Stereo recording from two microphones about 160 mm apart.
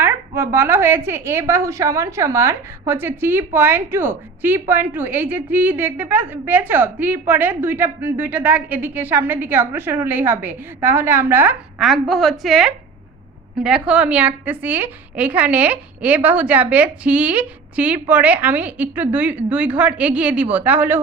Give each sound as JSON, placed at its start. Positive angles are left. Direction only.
{"t": 0.0, "sound": "a woman's voice", "side_deg": -15}
{"t": 11.8, "sound": "a woman's voice", "side_deg": 0}